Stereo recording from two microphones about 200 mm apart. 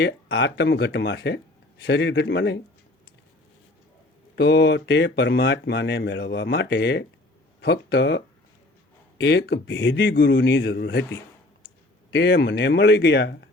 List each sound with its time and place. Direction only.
0.0 s speech: 65° left (ahead or behind)
4.4 s speech: 55° left (ahead or behind)